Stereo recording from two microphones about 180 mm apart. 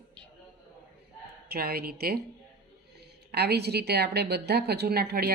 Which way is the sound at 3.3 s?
65° right (ahead or behind).